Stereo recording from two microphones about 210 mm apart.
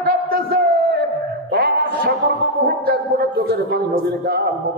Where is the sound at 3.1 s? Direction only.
45° right (ahead or behind).